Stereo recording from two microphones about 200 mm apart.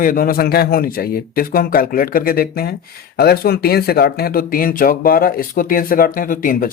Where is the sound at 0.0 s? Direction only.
45° left (ahead or behind).